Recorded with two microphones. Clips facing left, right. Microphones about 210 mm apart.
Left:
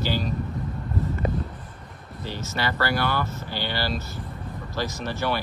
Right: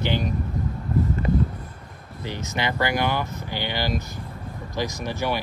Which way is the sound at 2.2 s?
15° right (ahead or behind).